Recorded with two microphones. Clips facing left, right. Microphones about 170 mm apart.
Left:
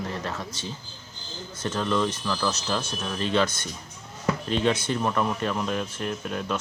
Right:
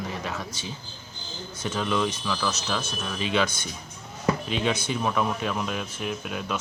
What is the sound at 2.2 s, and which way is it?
Speech, 5° left (ahead or behind).